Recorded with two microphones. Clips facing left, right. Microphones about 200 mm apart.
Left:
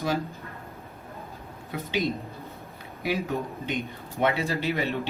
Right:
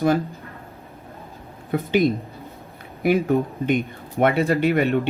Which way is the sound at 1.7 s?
55° right (ahead or behind).